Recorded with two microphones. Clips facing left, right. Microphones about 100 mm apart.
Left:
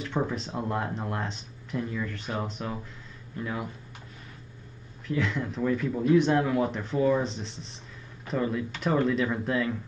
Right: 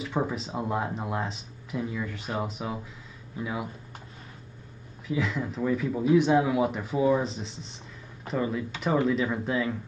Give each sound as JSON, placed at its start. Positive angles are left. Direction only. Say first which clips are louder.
{"t": 0.0, "sound": "speech", "louder": "even", "side_deg": -5}
{"t": 5.0, "sound": "speech", "louder": "even", "side_deg": -5}